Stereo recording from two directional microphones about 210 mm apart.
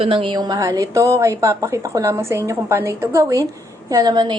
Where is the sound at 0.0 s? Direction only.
25° right (ahead or behind).